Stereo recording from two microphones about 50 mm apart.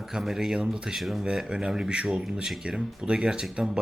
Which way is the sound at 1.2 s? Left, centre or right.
Centre.